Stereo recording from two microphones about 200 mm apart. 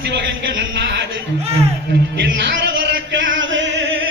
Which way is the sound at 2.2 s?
60° right (ahead or behind).